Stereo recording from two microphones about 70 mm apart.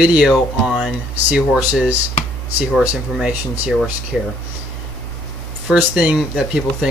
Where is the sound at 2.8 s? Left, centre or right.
Centre.